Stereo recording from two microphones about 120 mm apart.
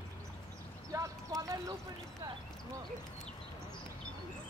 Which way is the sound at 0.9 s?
30° right (ahead or behind).